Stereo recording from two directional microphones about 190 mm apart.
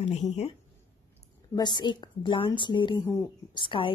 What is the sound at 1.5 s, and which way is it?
A woman's voice, 25° left (ahead or behind).